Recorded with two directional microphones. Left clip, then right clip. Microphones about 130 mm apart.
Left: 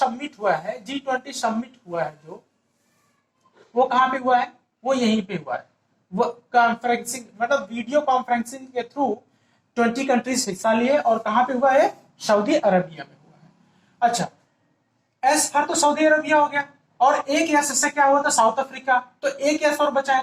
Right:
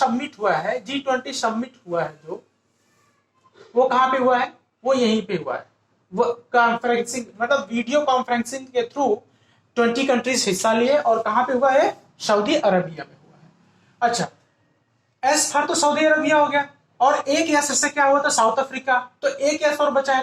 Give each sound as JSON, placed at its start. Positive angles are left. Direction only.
{"t": 0.0, "sound": "a woman's voice", "side_deg": -30}
{"t": 3.5, "sound": "a woman's voice", "side_deg": -30}
{"t": 8.5, "sound": "a woman's voice", "side_deg": -20}